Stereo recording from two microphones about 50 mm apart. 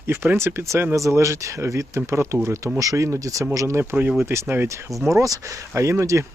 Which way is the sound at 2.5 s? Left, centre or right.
Right.